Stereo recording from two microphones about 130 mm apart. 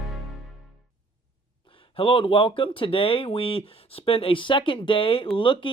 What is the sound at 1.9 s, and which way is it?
Speech, 45° left (ahead or behind).